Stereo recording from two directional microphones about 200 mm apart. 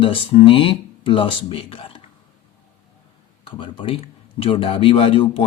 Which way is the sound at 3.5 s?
25° left (ahead or behind).